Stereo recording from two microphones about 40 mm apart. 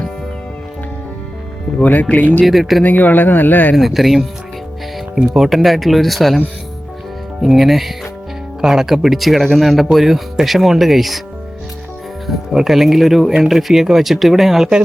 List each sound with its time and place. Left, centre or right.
1.8 s speech: left
2.4 s speech: centre
2.8 s speech: left
3.8 s speech: centre
7.4 s speech: centre
12.3 s speech: centre